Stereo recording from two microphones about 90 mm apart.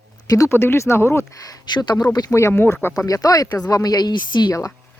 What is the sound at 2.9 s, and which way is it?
A woman's voice, 40° left (ahead or behind).